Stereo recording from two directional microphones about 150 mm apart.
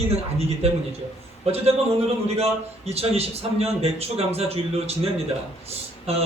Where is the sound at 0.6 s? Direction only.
45° right (ahead or behind).